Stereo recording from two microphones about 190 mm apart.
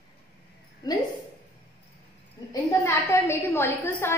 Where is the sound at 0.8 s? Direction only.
20° left (ahead or behind).